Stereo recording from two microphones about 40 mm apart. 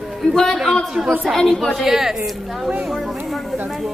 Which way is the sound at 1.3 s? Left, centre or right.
Centre.